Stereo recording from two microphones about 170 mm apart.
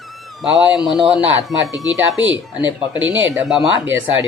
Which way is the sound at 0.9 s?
Centre (ahead or behind).